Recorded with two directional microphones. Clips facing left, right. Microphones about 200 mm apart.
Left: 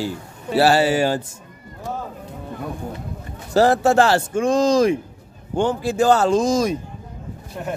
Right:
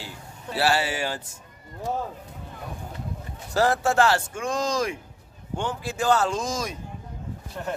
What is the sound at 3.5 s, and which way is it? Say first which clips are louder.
Speech: left 7 dB; 30° left (ahead or behind).